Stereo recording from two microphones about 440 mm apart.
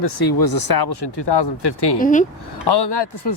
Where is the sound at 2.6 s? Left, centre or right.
Left.